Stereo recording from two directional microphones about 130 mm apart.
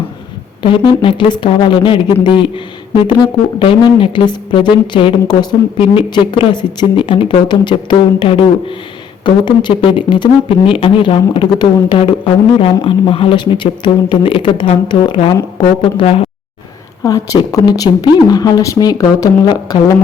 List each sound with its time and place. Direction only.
0.6 s speech: 40° left (ahead or behind)
17.0 s speech: 25° left (ahead or behind)